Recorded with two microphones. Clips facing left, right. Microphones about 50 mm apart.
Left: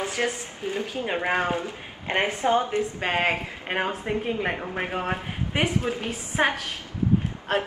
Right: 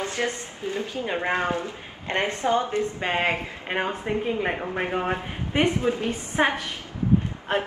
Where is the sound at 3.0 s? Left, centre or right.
Centre.